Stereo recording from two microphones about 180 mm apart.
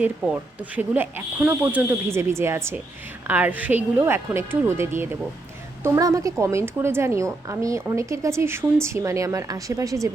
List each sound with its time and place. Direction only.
0.8 s a woman's voice: 10° right (ahead or behind)